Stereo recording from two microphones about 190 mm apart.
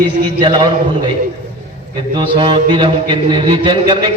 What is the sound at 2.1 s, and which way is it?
Speech, 25° right (ahead or behind).